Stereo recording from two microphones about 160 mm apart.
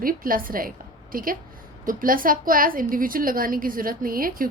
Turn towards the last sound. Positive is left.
turn(degrees=-60)  # may be behind; listen again after turning